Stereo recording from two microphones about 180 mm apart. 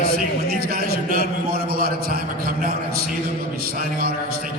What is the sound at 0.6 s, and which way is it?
A man's voice, 60° right (ahead or behind).